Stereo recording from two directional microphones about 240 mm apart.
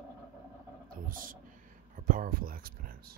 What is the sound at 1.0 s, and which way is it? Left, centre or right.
Speech, right.